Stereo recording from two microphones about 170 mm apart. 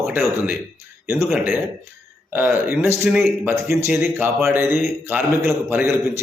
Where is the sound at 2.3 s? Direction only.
10° right (ahead or behind).